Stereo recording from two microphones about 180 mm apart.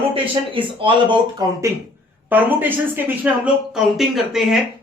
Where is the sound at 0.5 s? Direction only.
30° right (ahead or behind).